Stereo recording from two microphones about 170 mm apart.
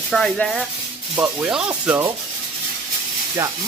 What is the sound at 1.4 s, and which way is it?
Speech, 5° right (ahead or behind).